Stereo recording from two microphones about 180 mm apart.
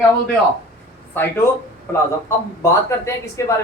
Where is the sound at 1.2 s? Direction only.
10° left (ahead or behind).